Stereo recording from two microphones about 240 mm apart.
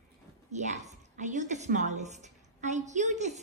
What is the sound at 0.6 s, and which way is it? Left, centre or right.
A woman's voice, right.